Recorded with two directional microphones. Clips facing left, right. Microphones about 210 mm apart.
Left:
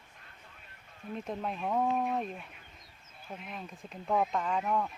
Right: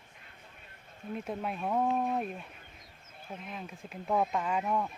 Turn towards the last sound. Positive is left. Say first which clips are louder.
# even
turn(degrees=-10)  # may be behind; listen again after turning